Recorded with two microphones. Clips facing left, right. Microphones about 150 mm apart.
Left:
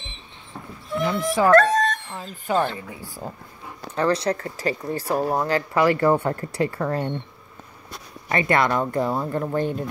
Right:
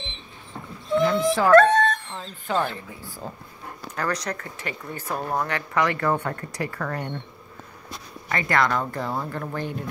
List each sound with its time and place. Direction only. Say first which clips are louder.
0.9 s speech: right 2 dB; 5° left (ahead or behind)
3.9 s speech: left 7 dB; 25° left (ahead or behind)
8.3 s speech: left 3 dB; 20° left (ahead or behind)